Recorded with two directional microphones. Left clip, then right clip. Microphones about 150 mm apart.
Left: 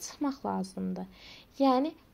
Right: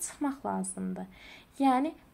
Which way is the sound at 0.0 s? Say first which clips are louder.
Even; 40° left (ahead or behind).